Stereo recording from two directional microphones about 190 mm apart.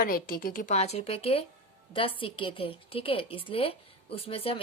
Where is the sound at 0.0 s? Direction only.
50° left (ahead or behind).